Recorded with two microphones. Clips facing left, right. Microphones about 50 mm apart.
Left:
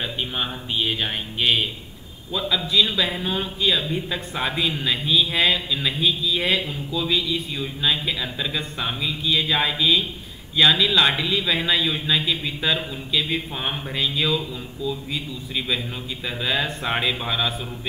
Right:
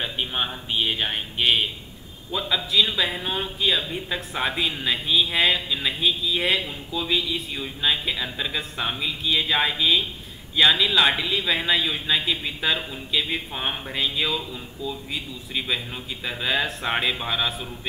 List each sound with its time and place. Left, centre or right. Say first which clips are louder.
0.0 s speech: even; centre